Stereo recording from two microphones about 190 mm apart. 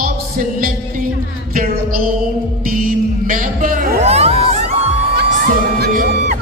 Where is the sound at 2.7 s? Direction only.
45° right (ahead or behind).